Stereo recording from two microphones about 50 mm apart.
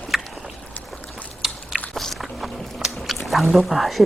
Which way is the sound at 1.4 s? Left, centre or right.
Centre.